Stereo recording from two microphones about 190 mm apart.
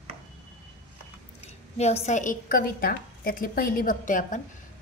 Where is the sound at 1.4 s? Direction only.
35° left (ahead or behind).